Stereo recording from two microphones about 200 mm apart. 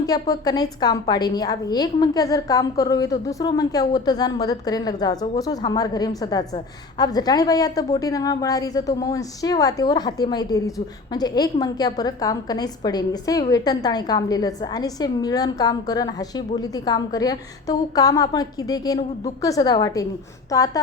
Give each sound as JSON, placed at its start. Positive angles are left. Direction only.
{"t": 0.0, "sound": "a woman's voice", "side_deg": 20}